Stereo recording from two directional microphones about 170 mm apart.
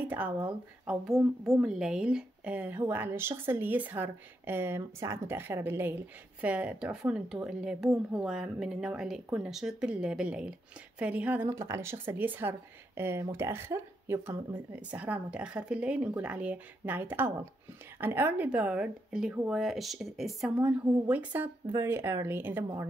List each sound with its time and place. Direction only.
0.0 s a woman's voice: 10° right (ahead or behind)
1.6 s a woman's voice: 5° right (ahead or behind)